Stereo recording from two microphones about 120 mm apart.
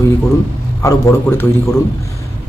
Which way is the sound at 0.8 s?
20° left (ahead or behind).